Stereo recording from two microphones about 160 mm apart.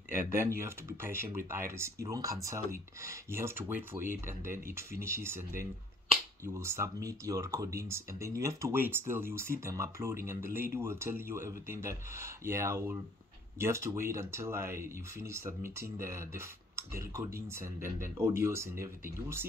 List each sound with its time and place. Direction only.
0.3 s speech: 15° right (ahead or behind)
6.4 s speech: 15° right (ahead or behind)